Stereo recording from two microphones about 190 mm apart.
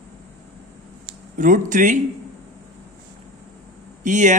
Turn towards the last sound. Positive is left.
turn(degrees=-40)  # may be behind; listen again after turning